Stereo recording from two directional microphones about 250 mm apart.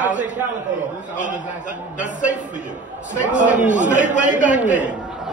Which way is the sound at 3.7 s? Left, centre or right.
Right.